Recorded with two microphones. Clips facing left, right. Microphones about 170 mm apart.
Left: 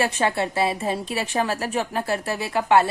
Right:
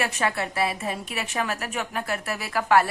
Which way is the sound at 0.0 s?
30° left (ahead or behind).